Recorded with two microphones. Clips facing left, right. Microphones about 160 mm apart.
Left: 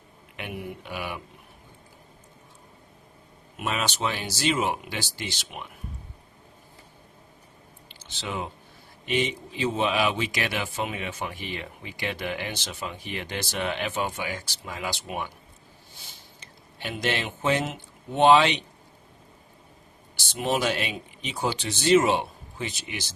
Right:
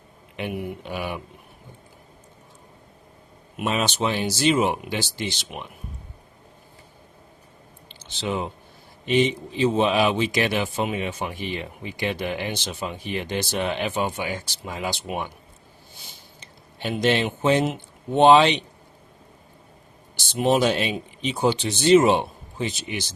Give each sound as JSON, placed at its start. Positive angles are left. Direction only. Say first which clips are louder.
{"t": 0.3, "sound": "a man's voice", "louder": "right 6 dB", "side_deg": -25}
{"t": 3.6, "sound": "a man's voice", "louder": "right 4 dB", "side_deg": -20}
{"t": 8.2, "sound": "a man's voice", "louder": "right 6 dB", "side_deg": -25}
{"t": 16.8, "sound": "a man's voice", "louder": "right 7 dB", "side_deg": -25}
{"t": 20.1, "sound": "a man's voice", "louder": "right 6 dB", "side_deg": -25}